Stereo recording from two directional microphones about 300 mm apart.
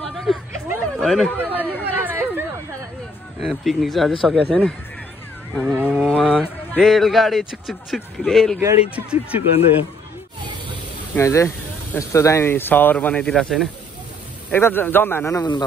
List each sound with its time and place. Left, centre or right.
0.0 s chatter: centre
3.3 s a man's voice: centre
11.1 s speech: centre